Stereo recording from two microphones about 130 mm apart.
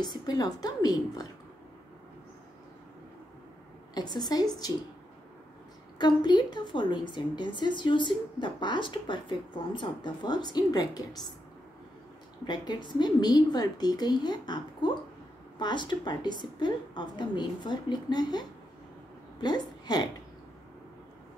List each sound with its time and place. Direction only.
0.0 s speech: 30° left (ahead or behind)
3.9 s speech: 30° left (ahead or behind)
5.9 s speech: 35° left (ahead or behind)
12.4 s speech: 35° left (ahead or behind)
19.4 s speech: 30° left (ahead or behind)